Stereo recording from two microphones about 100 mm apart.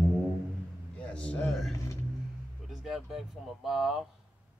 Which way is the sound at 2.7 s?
5° right (ahead or behind).